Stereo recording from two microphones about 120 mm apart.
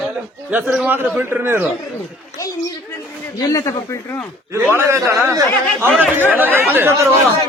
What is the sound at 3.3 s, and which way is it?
Speech, 30° left (ahead or behind).